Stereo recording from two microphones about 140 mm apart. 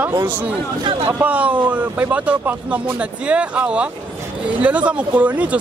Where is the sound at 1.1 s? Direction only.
15° right (ahead or behind).